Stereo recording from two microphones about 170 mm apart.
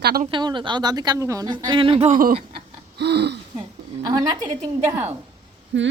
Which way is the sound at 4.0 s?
20° right (ahead or behind).